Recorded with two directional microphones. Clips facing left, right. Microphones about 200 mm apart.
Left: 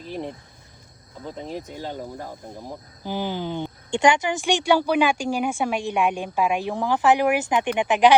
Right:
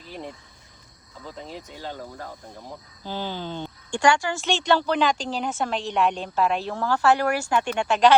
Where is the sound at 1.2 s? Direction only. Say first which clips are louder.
Left 5 dB; 20° left (ahead or behind).